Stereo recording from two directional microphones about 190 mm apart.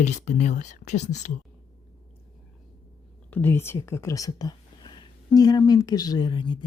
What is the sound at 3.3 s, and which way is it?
Speech, 10° left (ahead or behind).